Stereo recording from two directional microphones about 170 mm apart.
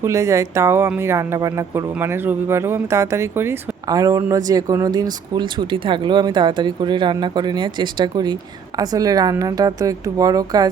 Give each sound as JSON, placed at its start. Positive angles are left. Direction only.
{"t": 0.0, "sound": "speech", "side_deg": -15}